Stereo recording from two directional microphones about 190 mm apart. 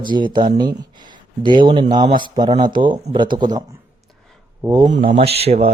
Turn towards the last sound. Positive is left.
turn(degrees=-30)  # may be behind; listen again after turning